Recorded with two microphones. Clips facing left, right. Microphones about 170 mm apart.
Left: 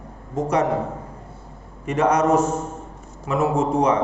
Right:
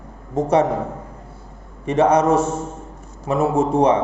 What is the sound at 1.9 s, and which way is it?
A man's voice, 30° right (ahead or behind).